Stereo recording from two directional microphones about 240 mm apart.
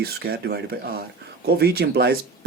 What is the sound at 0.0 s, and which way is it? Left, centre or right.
Speech, right.